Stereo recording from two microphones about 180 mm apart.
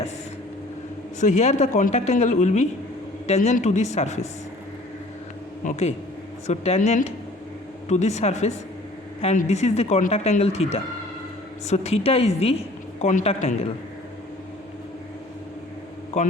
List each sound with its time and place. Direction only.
1.2 s a woman's voice: 40° left (ahead or behind)
5.6 s a woman's voice: 45° left (ahead or behind)